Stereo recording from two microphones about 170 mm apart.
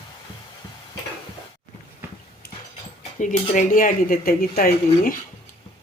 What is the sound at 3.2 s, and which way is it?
Speech, 50° left (ahead or behind).